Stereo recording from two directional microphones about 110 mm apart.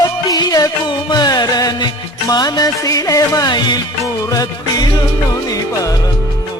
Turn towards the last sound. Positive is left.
turn(degrees=35)  # may be behind; listen again after turning